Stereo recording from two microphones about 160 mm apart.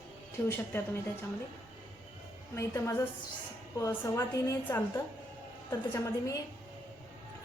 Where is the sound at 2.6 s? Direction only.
20° left (ahead or behind).